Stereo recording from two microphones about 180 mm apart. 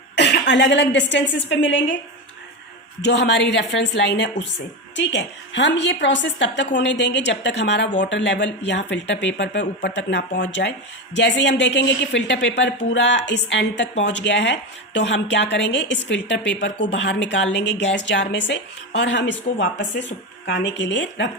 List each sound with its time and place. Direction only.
0.2 s a woman's voice: 70° left (ahead or behind); by 2.0 s 90° left
3.1 s a woman's voice: 75° left (ahead or behind)